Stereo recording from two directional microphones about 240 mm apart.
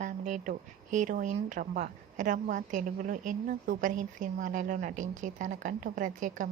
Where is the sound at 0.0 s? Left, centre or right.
Right.